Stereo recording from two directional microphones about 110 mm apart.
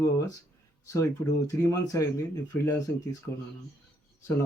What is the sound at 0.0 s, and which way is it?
Speech, 35° left (ahead or behind).